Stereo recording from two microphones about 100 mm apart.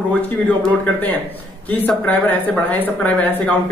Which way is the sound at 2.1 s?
15° left (ahead or behind).